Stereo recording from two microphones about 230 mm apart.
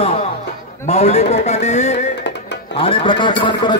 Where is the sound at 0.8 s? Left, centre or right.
Left.